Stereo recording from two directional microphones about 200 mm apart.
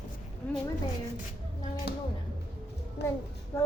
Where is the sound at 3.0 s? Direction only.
55° left (ahead or behind).